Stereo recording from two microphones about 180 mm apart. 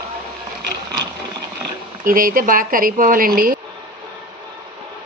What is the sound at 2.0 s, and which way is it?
A woman's voice, 50° right (ahead or behind).